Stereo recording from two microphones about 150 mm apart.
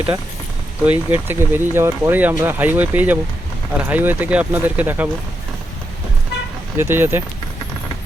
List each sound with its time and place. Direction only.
0.9 s speech: 15° right (ahead or behind)
6.7 s speech: 15° right (ahead or behind)